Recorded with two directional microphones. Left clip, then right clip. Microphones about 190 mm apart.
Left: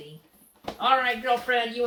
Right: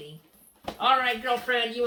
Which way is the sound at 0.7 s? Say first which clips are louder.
Even; 20° right (ahead or behind).